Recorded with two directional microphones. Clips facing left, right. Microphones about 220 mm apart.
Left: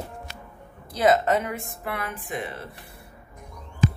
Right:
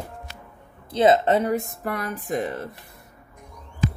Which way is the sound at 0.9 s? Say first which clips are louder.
Right 3 dB; 25° right (ahead or behind).